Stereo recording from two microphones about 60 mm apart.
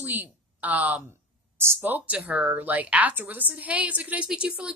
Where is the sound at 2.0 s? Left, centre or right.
Right.